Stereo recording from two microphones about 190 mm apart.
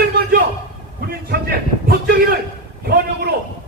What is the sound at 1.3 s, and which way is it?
Speech, 55° right (ahead or behind).